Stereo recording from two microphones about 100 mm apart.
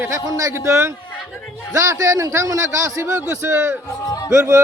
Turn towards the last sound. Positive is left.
turn(degrees=-25)  # may be behind; listen again after turning